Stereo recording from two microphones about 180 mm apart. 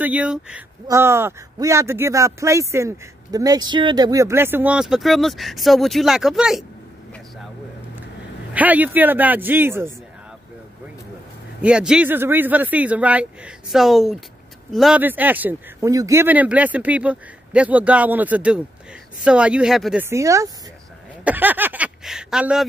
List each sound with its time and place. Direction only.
0.0 s speech: 5° right (ahead or behind)
8.5 s speech: 10° right (ahead or behind)
11.6 s speech: 5° right (ahead or behind)
20.1 s speech: 15° right (ahead or behind)